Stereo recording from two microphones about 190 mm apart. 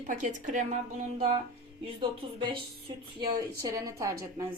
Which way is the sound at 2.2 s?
30° right (ahead or behind).